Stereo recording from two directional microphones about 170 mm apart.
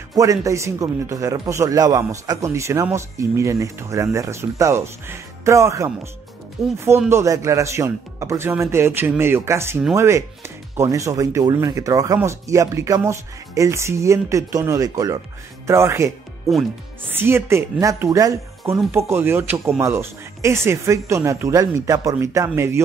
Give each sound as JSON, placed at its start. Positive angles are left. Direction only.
{"t": 0.1, "sound": "speech", "side_deg": -20}
{"t": 6.6, "sound": "speech", "side_deg": -5}
{"t": 7.1, "sound": "speech", "side_deg": -15}
{"t": 17.1, "sound": "speech", "side_deg": -15}